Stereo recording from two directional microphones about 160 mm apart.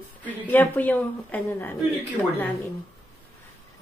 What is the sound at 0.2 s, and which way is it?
A woman's voice, 10° left (ahead or behind).